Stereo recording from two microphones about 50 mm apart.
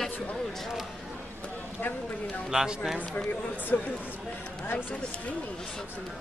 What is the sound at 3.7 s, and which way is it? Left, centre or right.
Speech, left.